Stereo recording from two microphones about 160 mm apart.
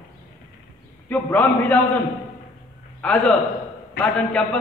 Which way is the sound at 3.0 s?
10° left (ahead or behind).